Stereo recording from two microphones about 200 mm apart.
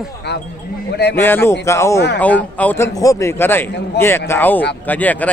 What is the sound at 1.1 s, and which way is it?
A man's voice, 10° left (ahead or behind).